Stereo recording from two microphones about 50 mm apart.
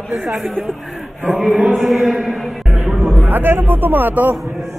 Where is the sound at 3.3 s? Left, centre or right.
Right.